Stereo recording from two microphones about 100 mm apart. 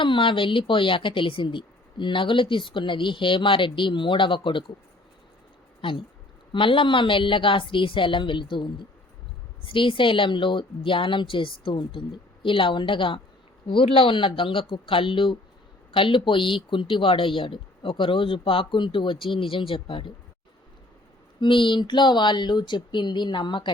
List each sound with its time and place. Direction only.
0.0 s speech: 55° left (ahead or behind)
5.8 s speech: 60° left (ahead or behind)
21.4 s speech: 55° left (ahead or behind)